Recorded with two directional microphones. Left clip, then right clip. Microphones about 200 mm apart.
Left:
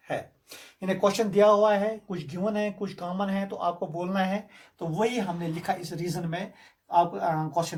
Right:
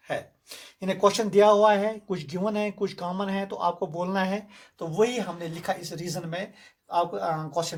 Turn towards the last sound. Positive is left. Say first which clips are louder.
# left 1 dB
turn(degrees=-40)  # may be behind; listen again after turning